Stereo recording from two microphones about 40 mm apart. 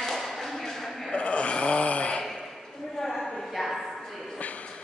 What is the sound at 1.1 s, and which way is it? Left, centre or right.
Gasp, left.